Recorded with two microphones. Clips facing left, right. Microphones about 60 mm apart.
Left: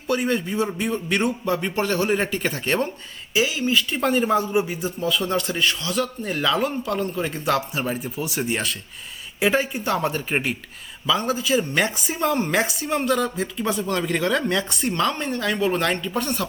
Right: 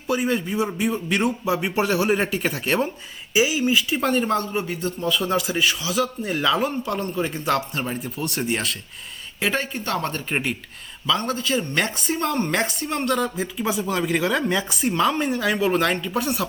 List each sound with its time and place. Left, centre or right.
0.1 s speech: centre